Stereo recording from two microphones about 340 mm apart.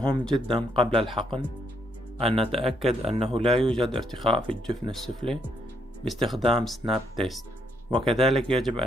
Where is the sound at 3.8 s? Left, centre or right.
Centre.